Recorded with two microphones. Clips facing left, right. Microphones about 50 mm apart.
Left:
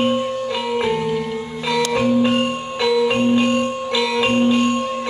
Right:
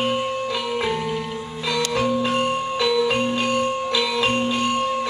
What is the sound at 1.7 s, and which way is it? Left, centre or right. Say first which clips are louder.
Music: left 4 dB; left.